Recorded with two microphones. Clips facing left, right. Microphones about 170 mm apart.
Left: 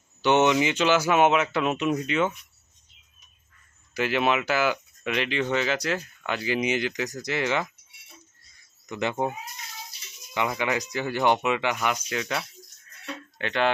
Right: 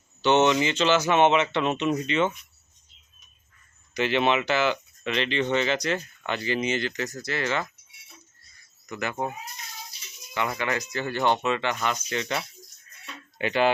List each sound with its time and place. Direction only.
0.2 s speech: 15° left (ahead or behind)
3.9 s speech: 5° left (ahead or behind)
8.9 s speech: 25° left (ahead or behind)
10.3 s speech: 15° left (ahead or behind); by 13.7 s 5° right (ahead or behind)